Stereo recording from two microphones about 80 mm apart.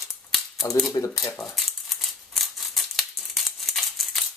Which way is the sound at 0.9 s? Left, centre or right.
Left.